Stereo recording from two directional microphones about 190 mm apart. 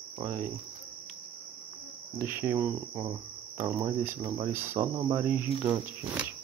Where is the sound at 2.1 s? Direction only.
10° right (ahead or behind).